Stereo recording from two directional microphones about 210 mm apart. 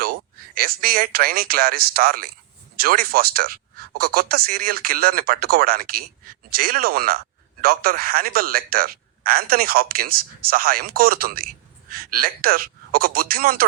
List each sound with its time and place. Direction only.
0.0 s a man's voice: 45° right (ahead or behind)